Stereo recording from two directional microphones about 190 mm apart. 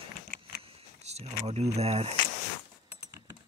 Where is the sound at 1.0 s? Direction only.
35° right (ahead or behind).